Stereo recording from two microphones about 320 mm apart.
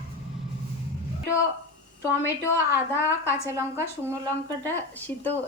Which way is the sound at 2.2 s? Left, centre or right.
Centre.